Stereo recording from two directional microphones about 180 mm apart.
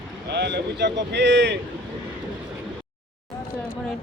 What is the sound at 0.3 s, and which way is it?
Speech, 70° right (ahead or behind).